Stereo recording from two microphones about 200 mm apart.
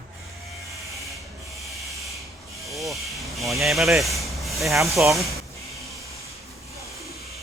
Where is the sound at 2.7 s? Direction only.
Centre (ahead or behind).